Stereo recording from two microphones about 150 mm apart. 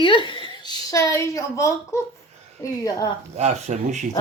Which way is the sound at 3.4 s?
50° right (ahead or behind).